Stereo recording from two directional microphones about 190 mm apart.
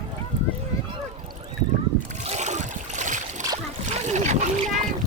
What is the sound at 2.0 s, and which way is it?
Boat, 35° right (ahead or behind).